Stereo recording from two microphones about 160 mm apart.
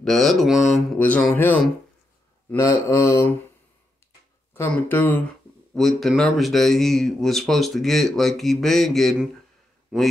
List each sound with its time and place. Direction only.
0.0 s a man's voice: centre (ahead or behind)
0.9 s mantra: 10° left (ahead or behind)
4.6 s mantra: 15° left (ahead or behind)
5.8 s a man's voice: centre (ahead or behind)